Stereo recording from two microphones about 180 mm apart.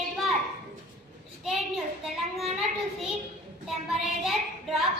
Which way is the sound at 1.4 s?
Centre (ahead or behind).